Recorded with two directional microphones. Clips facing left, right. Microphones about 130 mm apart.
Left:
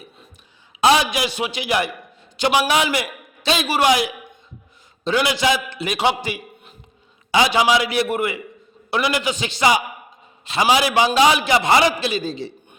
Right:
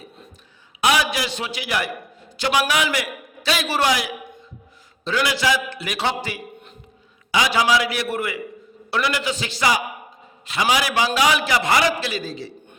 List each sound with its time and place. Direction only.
0.8 s a man's voice: 25° left (ahead or behind)
7.3 s a man's voice: 25° left (ahead or behind)